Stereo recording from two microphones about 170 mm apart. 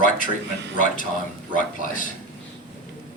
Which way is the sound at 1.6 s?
50° left (ahead or behind).